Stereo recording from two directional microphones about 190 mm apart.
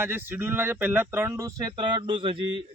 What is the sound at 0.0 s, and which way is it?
A man's voice, 10° right (ahead or behind).